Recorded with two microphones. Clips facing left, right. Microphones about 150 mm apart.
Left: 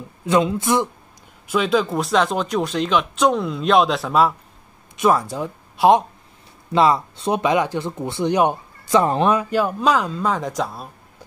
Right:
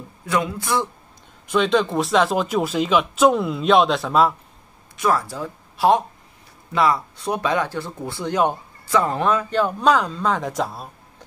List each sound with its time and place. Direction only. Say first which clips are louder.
0.3 s speech: left 5 dB; 20° left (ahead or behind)
1.5 s speech: even; 5° left (ahead or behind)
4.9 s speech: left 3 dB; 20° left (ahead or behind); by 10.9 s centre (ahead or behind)